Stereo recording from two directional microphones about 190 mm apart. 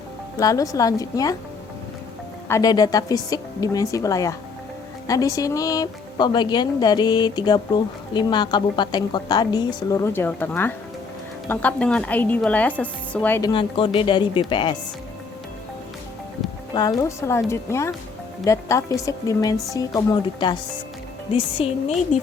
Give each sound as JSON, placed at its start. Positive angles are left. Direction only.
{"t": 0.3, "sound": "a woman's voice", "side_deg": 20}
{"t": 2.5, "sound": "a woman's voice", "side_deg": 20}
{"t": 13.5, "sound": "speech", "side_deg": 25}
{"t": 17.0, "sound": "a woman's voice", "side_deg": 15}